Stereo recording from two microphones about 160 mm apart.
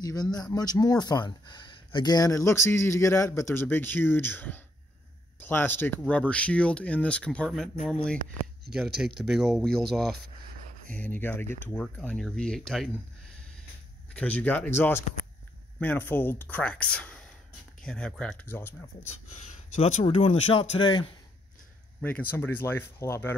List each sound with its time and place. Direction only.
0.0 s speech: 25° left (ahead or behind); by 7.7 s centre (ahead or behind)
8.7 s speech: centre (ahead or behind)
14.1 s speech: 10° left (ahead or behind)
19.4 s speech: 45° left (ahead or behind)
22.0 s speech: 10° left (ahead or behind)